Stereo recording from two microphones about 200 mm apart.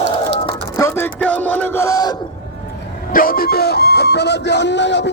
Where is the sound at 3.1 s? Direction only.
45° left (ahead or behind).